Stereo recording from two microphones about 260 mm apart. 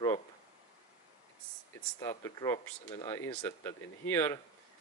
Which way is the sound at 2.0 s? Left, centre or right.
Centre.